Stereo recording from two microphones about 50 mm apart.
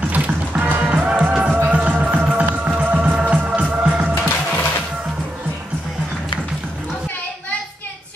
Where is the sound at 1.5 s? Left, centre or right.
Right.